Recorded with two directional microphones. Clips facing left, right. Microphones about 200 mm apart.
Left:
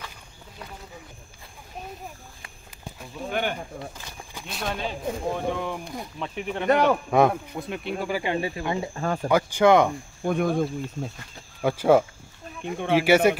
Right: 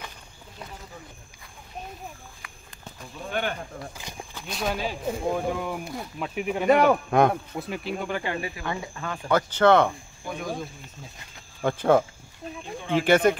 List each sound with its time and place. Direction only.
2.8 s speech: 10° left (ahead or behind)
4.5 s speech: centre (ahead or behind)
8.2 s speech: 25° left (ahead or behind)
9.0 s speech: 40° left (ahead or behind)
9.3 s speech: 10° left (ahead or behind)
10.2 s speech: 55° left (ahead or behind)
11.6 s speech: 10° left (ahead or behind)
13.0 s speech: 10° left (ahead or behind)